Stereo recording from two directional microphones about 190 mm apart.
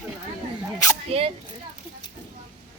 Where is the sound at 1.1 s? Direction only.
30° right (ahead or behind).